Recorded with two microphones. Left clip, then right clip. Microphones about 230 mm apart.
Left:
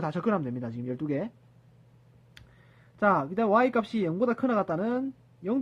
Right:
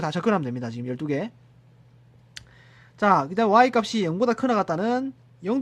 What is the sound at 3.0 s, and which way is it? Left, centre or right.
Speech, centre.